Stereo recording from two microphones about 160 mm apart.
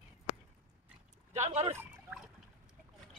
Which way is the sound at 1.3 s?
45° right (ahead or behind).